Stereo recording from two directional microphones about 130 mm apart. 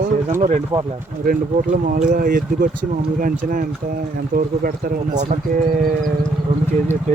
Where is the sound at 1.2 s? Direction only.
90° right.